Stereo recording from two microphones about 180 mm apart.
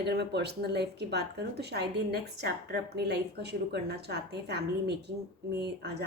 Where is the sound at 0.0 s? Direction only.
70° right (ahead or behind).